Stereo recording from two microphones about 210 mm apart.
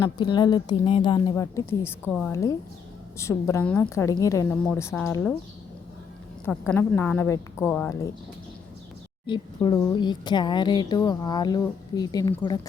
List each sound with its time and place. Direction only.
0.2 s a woman's voice: 20° left (ahead or behind)
6.4 s a woman's voice: 5° left (ahead or behind)
9.2 s a woman's voice: 20° left (ahead or behind)